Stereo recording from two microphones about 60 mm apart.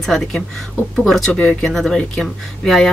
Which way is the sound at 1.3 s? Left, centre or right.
Left.